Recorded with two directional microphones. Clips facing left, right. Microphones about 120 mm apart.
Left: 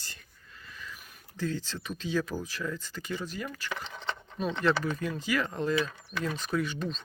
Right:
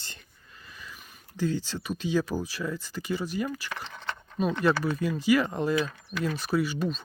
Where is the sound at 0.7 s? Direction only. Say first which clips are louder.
Left 1 dB; 15° right (ahead or behind).